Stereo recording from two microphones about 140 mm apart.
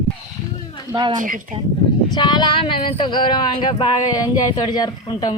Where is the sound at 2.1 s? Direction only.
30° left (ahead or behind).